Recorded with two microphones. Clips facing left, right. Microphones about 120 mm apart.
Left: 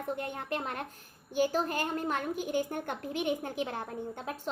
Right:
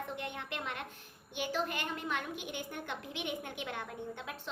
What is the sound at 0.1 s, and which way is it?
A woman's voice, 40° left (ahead or behind).